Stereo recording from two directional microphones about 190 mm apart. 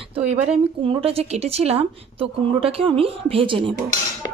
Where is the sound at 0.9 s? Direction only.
30° right (ahead or behind).